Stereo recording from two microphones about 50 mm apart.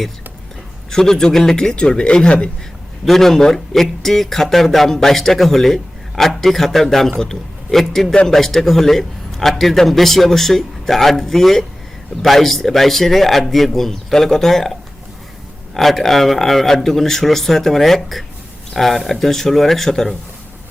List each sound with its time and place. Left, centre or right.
0.9 s speech: centre
3.1 s a man's voice: centre